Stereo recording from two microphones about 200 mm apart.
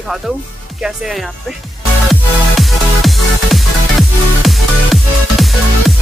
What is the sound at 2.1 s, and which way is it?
Music, centre (ahead or behind).